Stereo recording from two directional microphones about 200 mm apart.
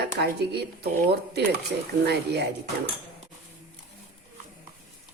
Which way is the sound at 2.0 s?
55° right (ahead or behind).